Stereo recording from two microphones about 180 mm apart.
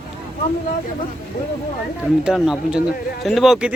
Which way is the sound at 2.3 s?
Centre (ahead or behind).